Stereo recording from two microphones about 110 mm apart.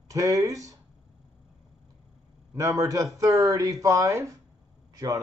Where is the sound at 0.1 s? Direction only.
30° right (ahead or behind).